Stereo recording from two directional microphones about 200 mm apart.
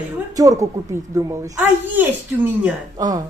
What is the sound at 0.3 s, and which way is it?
A woman's voice, 15° right (ahead or behind).